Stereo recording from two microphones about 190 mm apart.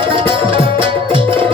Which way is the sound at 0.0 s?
25° right (ahead or behind).